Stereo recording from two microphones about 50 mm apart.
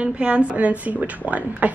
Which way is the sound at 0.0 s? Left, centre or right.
Right.